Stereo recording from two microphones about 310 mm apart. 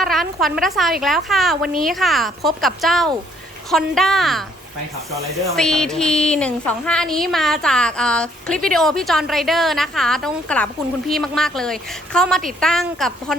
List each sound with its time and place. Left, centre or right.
0.0 s a woman's voice: centre
5.5 s a woman's voice: centre